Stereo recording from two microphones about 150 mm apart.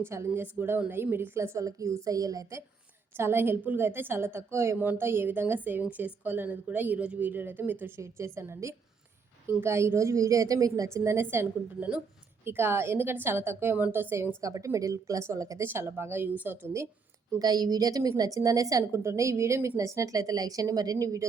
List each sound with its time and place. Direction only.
0.0 s a woman's voice: 15° right (ahead or behind)
17.3 s a woman's voice: 25° right (ahead or behind)